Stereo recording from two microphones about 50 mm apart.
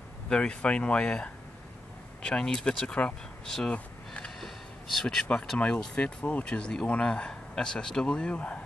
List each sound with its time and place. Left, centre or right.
0.3 s speech: left
3.7 s a sound: left
4.9 s speech: centre
5.6 s speech: left